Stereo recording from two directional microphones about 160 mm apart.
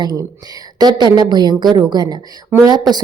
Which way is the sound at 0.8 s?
25° right (ahead or behind).